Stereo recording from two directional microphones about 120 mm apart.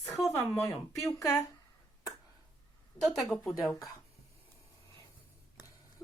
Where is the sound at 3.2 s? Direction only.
Centre (ahead or behind).